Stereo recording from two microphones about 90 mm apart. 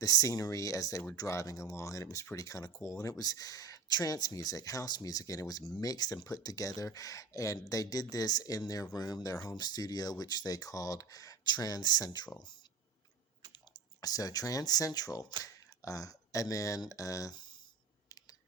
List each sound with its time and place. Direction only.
0.0 s speech: 40° left (ahead or behind)
14.0 s speech: 45° left (ahead or behind)